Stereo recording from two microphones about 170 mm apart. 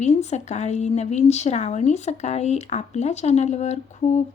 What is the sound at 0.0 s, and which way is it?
A woman's voice, 40° left (ahead or behind).